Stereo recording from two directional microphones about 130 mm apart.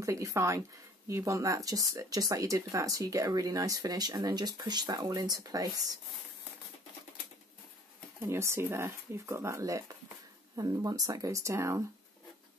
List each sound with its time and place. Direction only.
0.0 s speech: 25° right (ahead or behind)
8.3 s speech: 20° right (ahead or behind)